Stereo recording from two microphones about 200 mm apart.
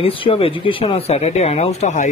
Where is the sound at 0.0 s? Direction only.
30° left (ahead or behind).